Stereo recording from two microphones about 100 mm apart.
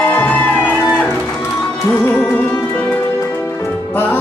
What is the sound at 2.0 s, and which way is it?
Music, 15° left (ahead or behind).